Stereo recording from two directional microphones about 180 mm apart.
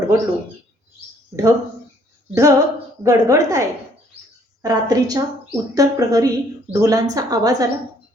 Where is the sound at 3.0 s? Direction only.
20° right (ahead or behind).